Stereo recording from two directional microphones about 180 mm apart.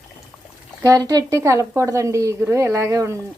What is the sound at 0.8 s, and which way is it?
A woman's voice, 20° right (ahead or behind).